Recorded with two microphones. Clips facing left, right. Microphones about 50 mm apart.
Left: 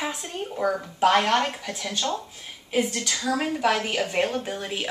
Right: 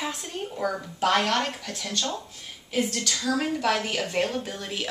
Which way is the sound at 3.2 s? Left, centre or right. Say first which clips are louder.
Left 2 dB; centre.